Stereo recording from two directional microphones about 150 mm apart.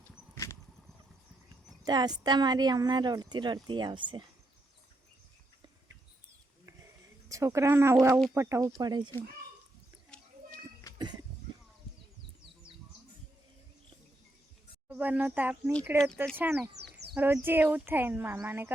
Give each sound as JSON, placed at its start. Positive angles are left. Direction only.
{"t": 1.8, "sound": "speech", "side_deg": -25}
{"t": 7.3, "sound": "speech", "side_deg": -20}
{"t": 10.1, "sound": "children playing", "side_deg": 5}
{"t": 14.8, "sound": "speech", "side_deg": -10}
{"t": 16.8, "sound": "a sound", "side_deg": -90}
{"t": 17.2, "sound": "speech", "side_deg": -15}